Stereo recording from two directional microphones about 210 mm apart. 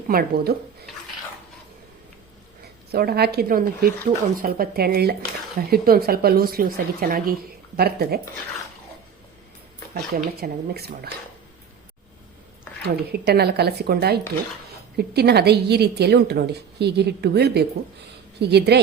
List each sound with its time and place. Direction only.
0.1 s a woman's voice: 45° right (ahead or behind)
2.9 s a woman's voice: 50° right (ahead or behind)
9.9 s a woman's voice: 45° right (ahead or behind)
12.8 s a woman's voice: 50° right (ahead or behind)